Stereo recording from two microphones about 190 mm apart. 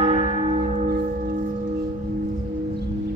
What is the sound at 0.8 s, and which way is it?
Singing bowl, 50° right (ahead or behind).